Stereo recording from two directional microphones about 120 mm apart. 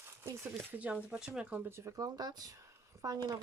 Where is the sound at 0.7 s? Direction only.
10° right (ahead or behind).